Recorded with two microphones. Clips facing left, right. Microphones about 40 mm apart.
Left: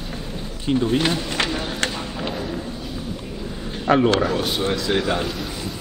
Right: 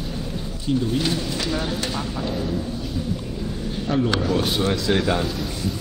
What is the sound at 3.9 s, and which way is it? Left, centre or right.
Speech, left.